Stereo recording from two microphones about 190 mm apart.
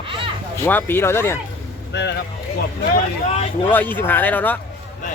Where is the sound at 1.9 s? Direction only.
65° left (ahead or behind).